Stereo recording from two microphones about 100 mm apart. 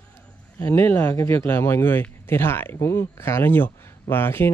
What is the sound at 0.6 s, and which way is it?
Speech, 25° left (ahead or behind).